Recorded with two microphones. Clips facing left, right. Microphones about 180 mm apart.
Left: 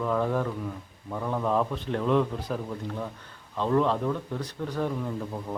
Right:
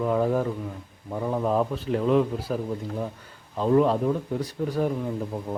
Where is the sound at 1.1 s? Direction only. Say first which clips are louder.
Right 2 dB; 20° right (ahead or behind).